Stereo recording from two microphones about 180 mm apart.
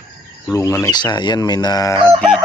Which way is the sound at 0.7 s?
20° left (ahead or behind).